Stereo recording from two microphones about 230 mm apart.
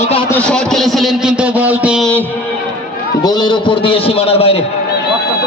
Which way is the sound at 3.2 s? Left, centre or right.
Centre.